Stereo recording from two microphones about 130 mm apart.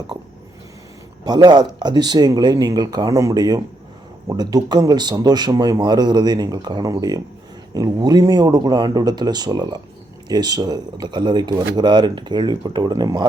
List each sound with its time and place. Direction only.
1.2 s speech: 30° right (ahead or behind)